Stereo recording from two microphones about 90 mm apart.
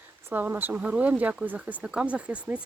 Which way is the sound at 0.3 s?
20° right (ahead or behind).